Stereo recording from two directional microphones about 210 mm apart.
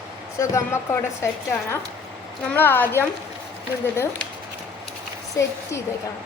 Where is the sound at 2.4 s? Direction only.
10° left (ahead or behind).